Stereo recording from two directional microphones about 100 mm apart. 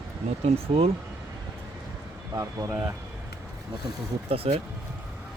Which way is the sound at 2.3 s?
35° right (ahead or behind).